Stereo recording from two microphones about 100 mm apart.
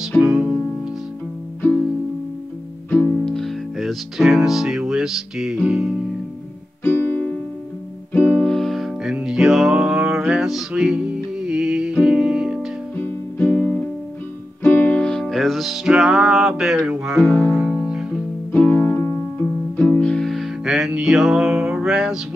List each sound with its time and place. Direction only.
0.2 s music: 5° right (ahead or behind)
2.9 s music: 10° left (ahead or behind); by 5.9 s 5° right (ahead or behind)
6.8 s music: 20° left (ahead or behind)
8.4 s music: 5° left (ahead or behind)
13.0 s music: 15° left (ahead or behind); by 16.9 s 5° right (ahead or behind)
16.9 s speech: 5° right (ahead or behind)
17.6 s music: 5° right (ahead or behind)
18.5 s music: 15° left (ahead or behind)
20.0 s music: 5° left (ahead or behind)